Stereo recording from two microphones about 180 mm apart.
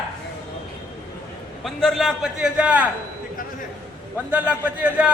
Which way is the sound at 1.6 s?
Centre (ahead or behind).